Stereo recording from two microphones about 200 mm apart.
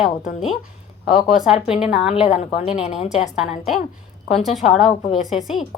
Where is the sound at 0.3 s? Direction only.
35° left (ahead or behind).